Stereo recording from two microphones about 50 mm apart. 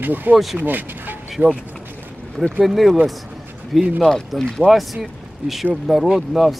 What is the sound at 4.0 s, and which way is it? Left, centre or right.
Speech, centre.